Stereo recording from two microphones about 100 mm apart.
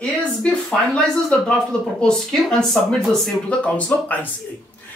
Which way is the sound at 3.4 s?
15° left (ahead or behind).